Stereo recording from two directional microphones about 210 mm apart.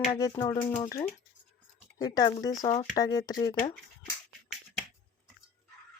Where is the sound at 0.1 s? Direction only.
20° left (ahead or behind).